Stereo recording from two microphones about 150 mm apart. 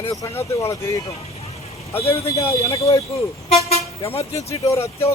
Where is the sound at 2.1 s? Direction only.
20° left (ahead or behind).